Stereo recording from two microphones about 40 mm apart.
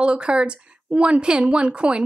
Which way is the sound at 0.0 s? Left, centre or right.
Right.